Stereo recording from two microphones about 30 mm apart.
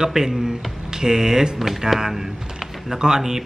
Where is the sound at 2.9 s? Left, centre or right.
Right.